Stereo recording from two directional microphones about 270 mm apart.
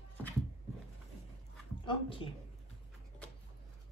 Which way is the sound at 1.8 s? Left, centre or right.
Centre.